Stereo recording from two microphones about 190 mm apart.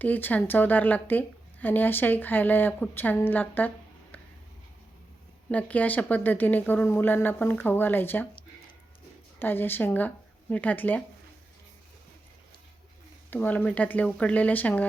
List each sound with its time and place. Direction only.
0.0 s a woman's voice: 10° left (ahead or behind)
5.5 s a woman's voice: 10° left (ahead or behind)
9.4 s a woman's voice: 10° left (ahead or behind)
13.3 s a woman's voice: 10° left (ahead or behind)